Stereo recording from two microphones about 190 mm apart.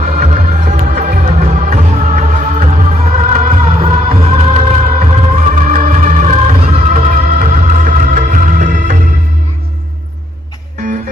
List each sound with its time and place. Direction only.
0.0 s music: 35° right (ahead or behind)